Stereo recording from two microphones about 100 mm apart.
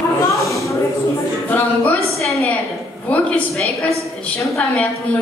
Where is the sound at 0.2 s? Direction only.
30° left (ahead or behind).